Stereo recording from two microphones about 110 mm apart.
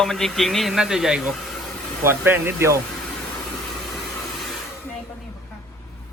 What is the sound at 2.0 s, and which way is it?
Speech, 20° right (ahead or behind).